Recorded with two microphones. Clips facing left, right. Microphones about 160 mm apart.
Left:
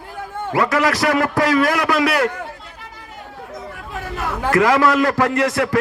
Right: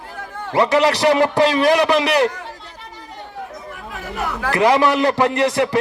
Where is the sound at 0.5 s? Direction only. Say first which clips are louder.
Right 3 dB; 20° right (ahead or behind).